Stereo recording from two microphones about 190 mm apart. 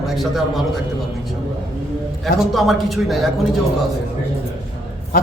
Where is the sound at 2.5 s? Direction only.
Centre (ahead or behind).